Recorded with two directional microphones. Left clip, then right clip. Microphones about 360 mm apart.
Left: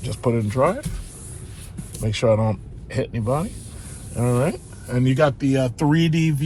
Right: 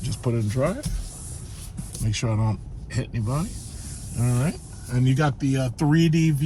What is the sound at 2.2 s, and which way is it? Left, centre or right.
Speech, left.